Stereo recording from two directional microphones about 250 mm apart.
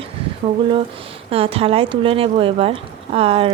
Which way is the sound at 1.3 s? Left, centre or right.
Right.